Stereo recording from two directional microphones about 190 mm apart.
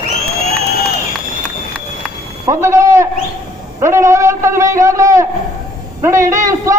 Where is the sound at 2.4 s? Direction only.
15° right (ahead or behind).